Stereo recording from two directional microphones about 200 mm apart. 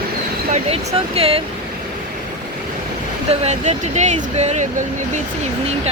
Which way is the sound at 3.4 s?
35° right (ahead or behind).